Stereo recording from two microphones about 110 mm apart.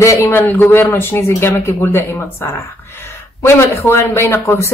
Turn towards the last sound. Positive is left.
turn(degrees=20)  # may be behind; listen again after turning